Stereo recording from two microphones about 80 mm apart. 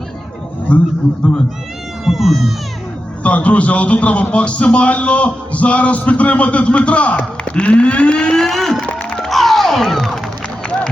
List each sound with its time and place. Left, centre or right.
2.0 s speech: centre
3.2 s a man's voice: centre
9.1 s music: centre